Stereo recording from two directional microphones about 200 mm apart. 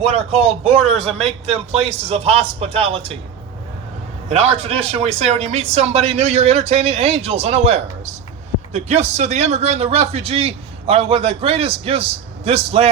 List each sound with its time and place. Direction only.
0.0 s a man's voice: 35° right (ahead or behind)
4.3 s a man's voice: 35° right (ahead or behind)